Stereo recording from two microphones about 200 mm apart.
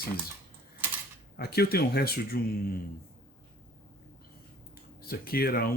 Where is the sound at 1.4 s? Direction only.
50° left (ahead or behind).